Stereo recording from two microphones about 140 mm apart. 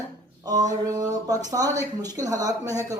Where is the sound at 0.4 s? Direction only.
25° right (ahead or behind).